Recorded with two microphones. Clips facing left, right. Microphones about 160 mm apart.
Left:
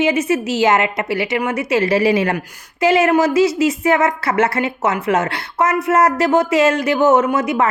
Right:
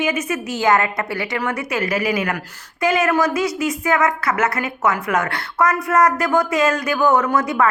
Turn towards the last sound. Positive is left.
turn(degrees=25)  # may be behind; listen again after turning